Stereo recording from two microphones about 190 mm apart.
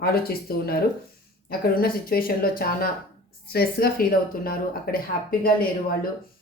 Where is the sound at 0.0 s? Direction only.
55° left (ahead or behind).